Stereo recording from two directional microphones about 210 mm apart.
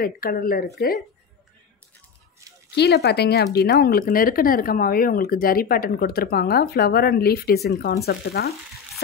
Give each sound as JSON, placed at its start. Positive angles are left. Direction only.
{"t": 0.0, "sound": "speech", "side_deg": 45}
{"t": 2.7, "sound": "speech", "side_deg": 50}